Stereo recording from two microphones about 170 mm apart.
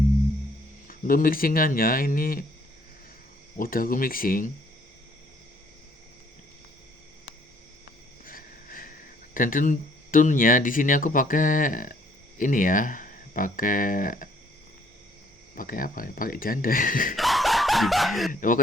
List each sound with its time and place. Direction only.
0.9 s speech: 55° left (ahead or behind)
3.6 s speech: 55° left (ahead or behind)
8.2 s a sound: 55° left (ahead or behind)
9.3 s speech: 55° left (ahead or behind)
15.5 s speech: 55° left (ahead or behind)
17.2 s snicker: centre (ahead or behind)
18.3 s speech: 50° left (ahead or behind)